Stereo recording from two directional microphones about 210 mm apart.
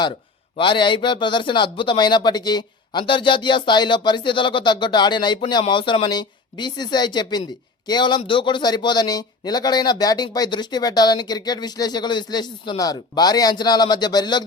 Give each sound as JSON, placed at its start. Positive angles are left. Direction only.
{"t": 0.5, "sound": "a man's voice", "side_deg": 25}